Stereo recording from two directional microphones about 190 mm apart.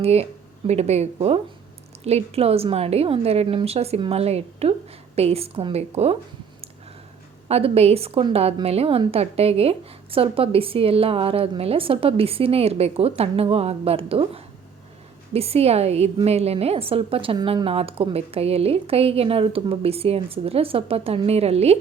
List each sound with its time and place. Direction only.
0.0 s a woman's voice: 30° right (ahead or behind)
7.4 s a woman's voice: 30° right (ahead or behind)